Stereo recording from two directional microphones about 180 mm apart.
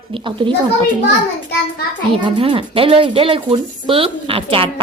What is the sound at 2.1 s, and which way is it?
Speech, 30° right (ahead or behind).